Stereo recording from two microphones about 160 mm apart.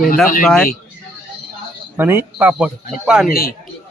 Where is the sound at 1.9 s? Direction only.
15° right (ahead or behind).